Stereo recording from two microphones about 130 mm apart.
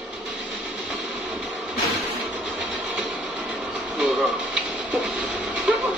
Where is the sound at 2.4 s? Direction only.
10° right (ahead or behind).